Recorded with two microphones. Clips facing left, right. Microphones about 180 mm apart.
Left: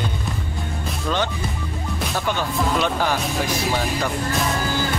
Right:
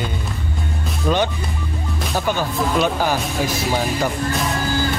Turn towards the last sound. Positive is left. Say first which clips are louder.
# right 2 dB
turn(degrees=-5)  # may be behind; listen again after turning